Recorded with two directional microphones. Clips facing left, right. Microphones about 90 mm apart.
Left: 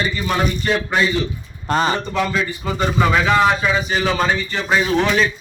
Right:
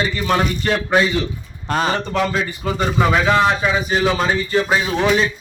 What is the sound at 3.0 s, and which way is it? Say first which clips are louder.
A man's voice: even; 10° right (ahead or behind).